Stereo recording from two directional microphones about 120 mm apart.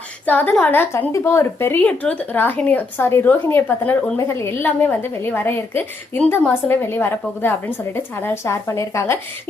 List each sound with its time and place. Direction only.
0.3 s a woman's voice: 15° left (ahead or behind)